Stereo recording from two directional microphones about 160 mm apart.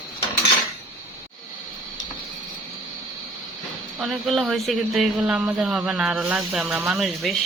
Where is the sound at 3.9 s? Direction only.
5° right (ahead or behind).